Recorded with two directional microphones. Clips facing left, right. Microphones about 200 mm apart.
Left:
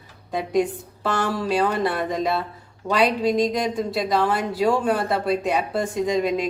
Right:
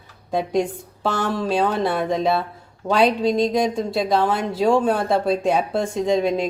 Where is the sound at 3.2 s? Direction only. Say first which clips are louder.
Right 2 dB; 25° right (ahead or behind).